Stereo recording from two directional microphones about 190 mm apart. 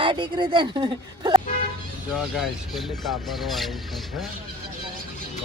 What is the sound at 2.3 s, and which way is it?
Speech, centre (ahead or behind).